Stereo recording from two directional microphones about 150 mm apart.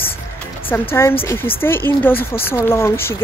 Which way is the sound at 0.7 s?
15° left (ahead or behind).